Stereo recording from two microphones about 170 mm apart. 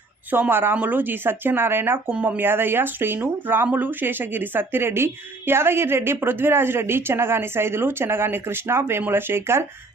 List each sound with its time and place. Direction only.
0.3 s speech: 10° right (ahead or behind)